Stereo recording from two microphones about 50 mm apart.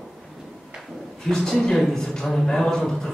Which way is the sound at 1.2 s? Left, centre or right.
Centre.